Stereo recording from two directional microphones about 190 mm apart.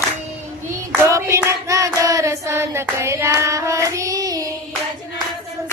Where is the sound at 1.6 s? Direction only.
15° right (ahead or behind).